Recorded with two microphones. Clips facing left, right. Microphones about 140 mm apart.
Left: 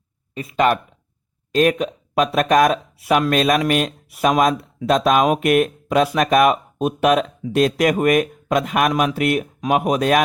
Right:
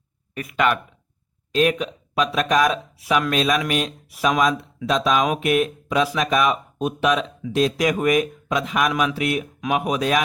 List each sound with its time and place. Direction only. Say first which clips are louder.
0.3 s speech: left 3 dB; 30° left (ahead or behind)
1.5 s speech: left 3 dB; 45° left (ahead or behind)
8.9 s speech: left 3 dB; 40° left (ahead or behind)
9.6 s speech: left 4 dB; 40° left (ahead or behind)